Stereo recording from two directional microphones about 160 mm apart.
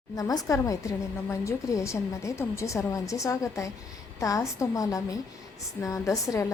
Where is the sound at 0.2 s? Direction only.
20° left (ahead or behind).